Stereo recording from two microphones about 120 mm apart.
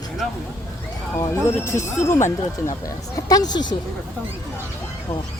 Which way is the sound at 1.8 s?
20° left (ahead or behind).